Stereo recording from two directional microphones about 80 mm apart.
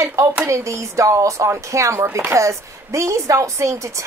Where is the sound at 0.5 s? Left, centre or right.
Right.